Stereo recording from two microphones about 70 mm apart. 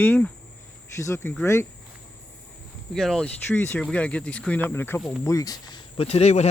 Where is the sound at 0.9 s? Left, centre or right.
Left.